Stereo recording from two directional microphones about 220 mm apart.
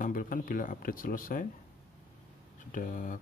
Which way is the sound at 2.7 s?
40° left (ahead or behind).